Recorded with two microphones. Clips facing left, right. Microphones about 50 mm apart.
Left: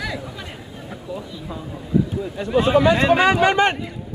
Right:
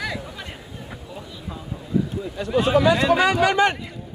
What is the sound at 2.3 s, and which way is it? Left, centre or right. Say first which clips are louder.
Speech: left 2 dB; left.